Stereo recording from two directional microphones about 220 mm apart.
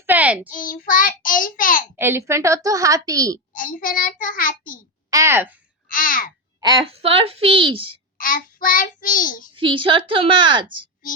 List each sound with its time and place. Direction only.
0.0 s child singing: 10° right (ahead or behind)
0.5 s child singing: 40° left (ahead or behind)
2.0 s a woman's voice: 10° right (ahead or behind)
3.5 s child singing: 40° left (ahead or behind)
5.1 s a woman's voice: 10° right (ahead or behind)
5.9 s child singing: 40° left (ahead or behind)
6.8 s speech: 25° right (ahead or behind)
8.2 s child singing: 40° left (ahead or behind)
9.6 s speech: 25° right (ahead or behind)